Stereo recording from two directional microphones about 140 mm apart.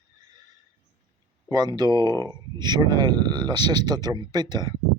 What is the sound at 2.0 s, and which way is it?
Speech, 20° left (ahead or behind).